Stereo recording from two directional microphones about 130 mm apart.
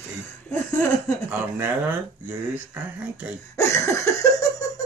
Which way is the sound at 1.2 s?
15° right (ahead or behind).